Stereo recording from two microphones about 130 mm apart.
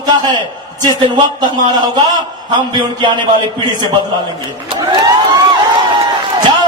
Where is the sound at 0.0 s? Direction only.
30° right (ahead or behind).